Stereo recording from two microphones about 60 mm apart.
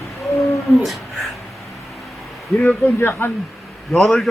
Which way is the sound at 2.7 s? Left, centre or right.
Left.